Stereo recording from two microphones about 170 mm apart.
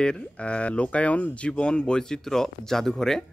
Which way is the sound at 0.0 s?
5° left (ahead or behind).